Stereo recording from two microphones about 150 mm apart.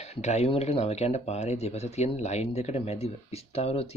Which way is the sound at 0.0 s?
45° left (ahead or behind).